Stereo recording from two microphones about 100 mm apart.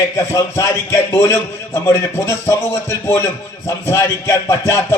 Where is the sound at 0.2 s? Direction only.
30° left (ahead or behind).